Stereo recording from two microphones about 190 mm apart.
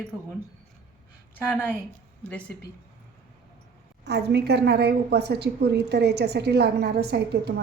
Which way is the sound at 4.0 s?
60° right (ahead or behind).